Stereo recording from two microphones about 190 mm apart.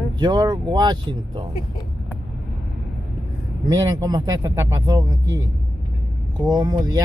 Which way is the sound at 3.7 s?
15° right (ahead or behind).